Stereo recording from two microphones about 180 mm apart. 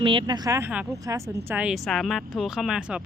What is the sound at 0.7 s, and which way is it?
Speech, 5° right (ahead or behind).